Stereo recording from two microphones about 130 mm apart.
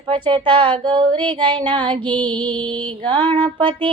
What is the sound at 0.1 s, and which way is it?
Female singing, 40° right (ahead or behind).